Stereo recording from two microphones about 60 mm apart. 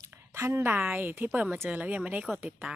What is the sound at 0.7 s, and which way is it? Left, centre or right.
A woman's voice, right.